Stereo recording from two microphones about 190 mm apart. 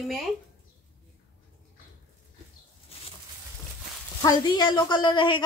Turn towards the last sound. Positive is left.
turn(degrees=25)  # may be behind; listen again after turning